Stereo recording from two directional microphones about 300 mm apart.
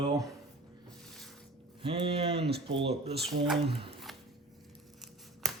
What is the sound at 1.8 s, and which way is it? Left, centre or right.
Speech, centre.